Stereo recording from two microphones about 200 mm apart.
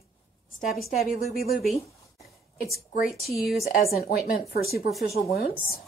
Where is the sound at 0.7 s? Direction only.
Centre (ahead or behind).